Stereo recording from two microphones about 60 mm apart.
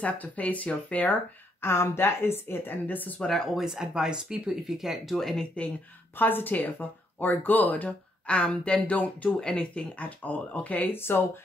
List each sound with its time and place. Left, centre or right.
0.0 s speech: left
1.6 s speech: left
3.2 s speech: centre
3.6 s speech: centre
6.1 s speech: left
9.4 s speech: centre; by 11.2 s left